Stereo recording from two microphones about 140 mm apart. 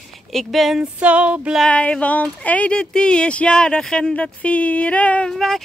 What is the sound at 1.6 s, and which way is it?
Speech, 5° left (ahead or behind).